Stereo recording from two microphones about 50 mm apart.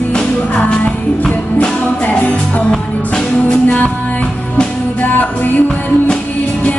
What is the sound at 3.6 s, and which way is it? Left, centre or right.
Music, left.